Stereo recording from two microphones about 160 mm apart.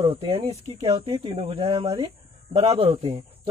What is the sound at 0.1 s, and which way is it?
Speech, 30° right (ahead or behind).